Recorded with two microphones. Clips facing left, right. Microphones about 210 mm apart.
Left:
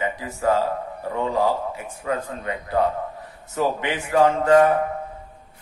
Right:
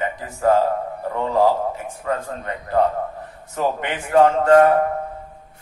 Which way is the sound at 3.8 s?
55° right (ahead or behind).